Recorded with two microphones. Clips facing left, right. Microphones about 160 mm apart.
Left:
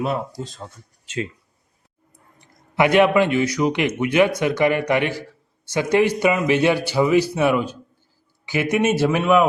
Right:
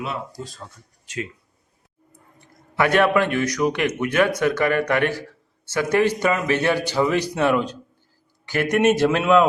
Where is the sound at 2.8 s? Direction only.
15° left (ahead or behind).